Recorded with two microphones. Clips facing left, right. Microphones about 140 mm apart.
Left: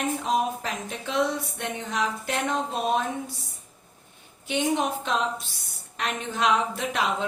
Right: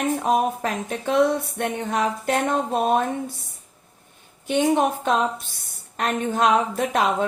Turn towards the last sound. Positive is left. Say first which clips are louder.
# right 5 dB
turn(degrees=-45)  # may be behind; listen again after turning